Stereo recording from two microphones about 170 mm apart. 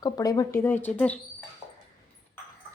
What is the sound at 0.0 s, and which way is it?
Speech, 20° left (ahead or behind).